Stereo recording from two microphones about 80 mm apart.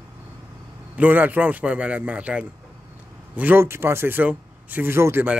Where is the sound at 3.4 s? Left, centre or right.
Right.